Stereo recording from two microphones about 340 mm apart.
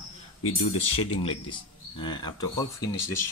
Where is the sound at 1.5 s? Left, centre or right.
Centre.